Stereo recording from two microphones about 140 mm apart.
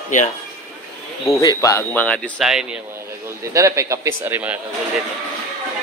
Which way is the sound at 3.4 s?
20° right (ahead or behind).